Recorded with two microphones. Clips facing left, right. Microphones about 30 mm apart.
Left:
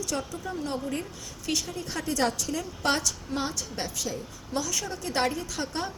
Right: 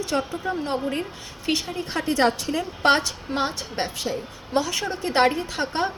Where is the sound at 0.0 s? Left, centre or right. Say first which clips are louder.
Right 7 dB; right.